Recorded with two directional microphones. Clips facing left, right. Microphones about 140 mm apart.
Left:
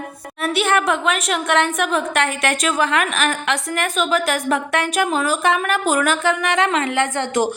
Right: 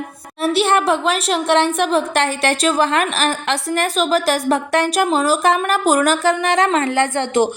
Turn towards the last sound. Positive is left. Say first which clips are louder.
# right 3 dB
turn(degrees=-30)  # may be behind; listen again after turning